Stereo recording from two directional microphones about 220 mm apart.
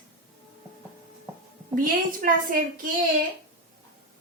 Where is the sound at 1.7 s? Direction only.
40° right (ahead or behind).